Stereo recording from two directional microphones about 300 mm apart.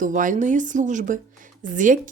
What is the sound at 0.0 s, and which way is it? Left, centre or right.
A woman's voice, right.